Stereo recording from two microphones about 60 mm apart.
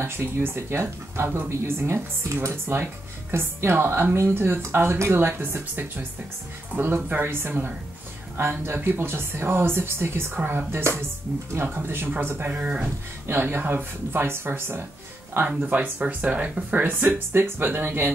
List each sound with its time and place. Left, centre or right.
0.0 s speech: right
10.7 s speech: right
12.5 s speech: right
13.3 s speech: right